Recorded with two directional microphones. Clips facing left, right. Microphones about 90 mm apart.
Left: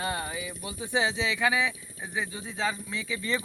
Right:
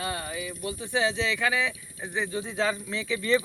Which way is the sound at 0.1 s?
15° left (ahead or behind).